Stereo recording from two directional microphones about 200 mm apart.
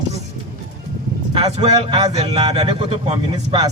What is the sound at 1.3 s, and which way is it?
A man's voice, 30° right (ahead or behind).